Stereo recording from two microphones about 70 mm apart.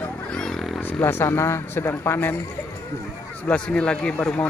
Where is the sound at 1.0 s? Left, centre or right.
Left.